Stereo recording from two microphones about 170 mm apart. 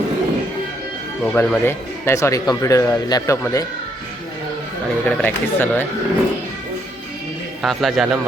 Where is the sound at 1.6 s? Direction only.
15° left (ahead or behind).